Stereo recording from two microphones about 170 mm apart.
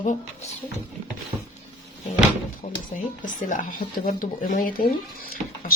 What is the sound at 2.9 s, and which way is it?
Speech, 50° left (ahead or behind).